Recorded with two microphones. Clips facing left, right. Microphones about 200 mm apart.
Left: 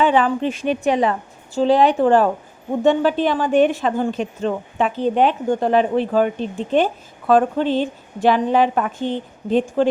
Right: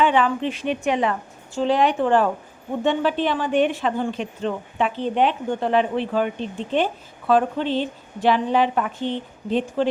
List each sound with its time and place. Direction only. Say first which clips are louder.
0.0 s a woman's voice: left 3 dB; 40° left (ahead or behind)